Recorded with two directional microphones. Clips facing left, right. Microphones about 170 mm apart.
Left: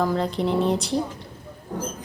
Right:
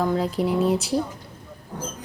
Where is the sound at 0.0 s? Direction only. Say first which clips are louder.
Even; 5° right (ahead or behind).